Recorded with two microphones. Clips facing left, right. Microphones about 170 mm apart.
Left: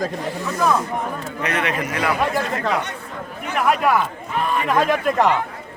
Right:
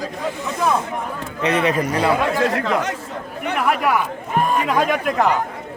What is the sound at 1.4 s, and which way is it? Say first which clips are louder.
Speech: right 5 dB; 30° right (ahead or behind).